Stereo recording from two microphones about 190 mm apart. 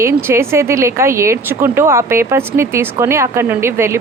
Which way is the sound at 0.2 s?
15° right (ahead or behind).